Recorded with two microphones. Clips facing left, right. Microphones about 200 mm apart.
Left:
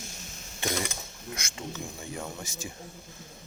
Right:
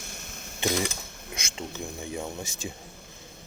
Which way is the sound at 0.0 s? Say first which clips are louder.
Right 1 dB; 60° right (ahead or behind).